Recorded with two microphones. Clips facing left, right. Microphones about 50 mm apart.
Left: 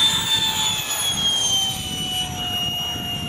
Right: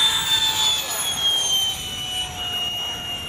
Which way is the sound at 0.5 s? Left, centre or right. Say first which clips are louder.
Right 1 dB; centre.